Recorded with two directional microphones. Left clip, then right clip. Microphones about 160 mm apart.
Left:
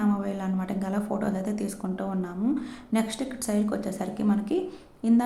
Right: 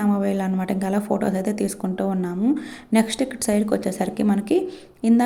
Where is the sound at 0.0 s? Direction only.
35° right (ahead or behind).